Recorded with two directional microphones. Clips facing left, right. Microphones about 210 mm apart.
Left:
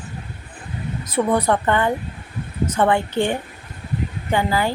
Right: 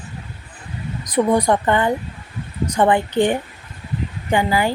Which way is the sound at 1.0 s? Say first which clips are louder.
Right 3 dB; 15° right (ahead or behind).